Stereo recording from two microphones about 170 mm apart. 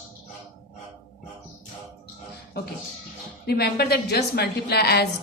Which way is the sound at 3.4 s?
70° left (ahead or behind).